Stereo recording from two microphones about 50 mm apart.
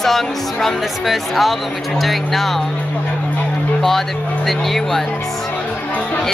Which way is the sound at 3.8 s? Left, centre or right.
Centre.